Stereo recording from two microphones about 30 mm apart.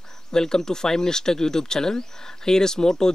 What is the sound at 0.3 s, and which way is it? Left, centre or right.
Speech, left.